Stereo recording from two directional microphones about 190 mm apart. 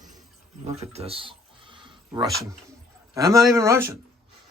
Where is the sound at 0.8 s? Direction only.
30° right (ahead or behind).